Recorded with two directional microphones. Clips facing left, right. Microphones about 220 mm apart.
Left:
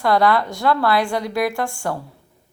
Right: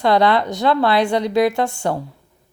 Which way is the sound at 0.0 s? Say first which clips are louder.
Right 2 dB; 20° right (ahead or behind).